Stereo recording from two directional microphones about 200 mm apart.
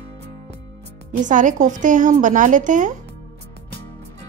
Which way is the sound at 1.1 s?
40° right (ahead or behind).